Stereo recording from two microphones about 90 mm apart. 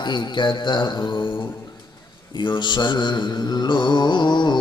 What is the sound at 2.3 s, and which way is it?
Mantra, 60° left (ahead or behind).